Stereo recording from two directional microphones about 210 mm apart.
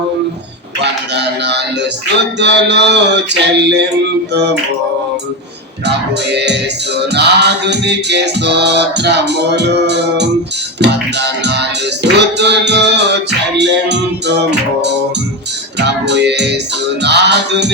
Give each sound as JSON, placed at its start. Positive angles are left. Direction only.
{"t": 0.8, "sound": "music", "side_deg": -55}
{"t": 5.8, "sound": "music", "side_deg": -55}